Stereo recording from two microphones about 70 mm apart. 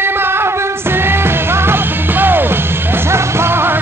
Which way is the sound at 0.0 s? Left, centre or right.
Right.